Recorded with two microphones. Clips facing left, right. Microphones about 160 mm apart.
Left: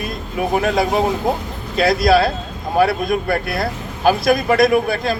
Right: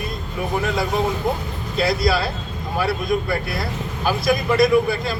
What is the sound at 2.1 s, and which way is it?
Speech, 55° left (ahead or behind).